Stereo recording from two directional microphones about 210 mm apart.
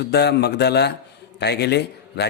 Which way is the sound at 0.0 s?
50° left (ahead or behind).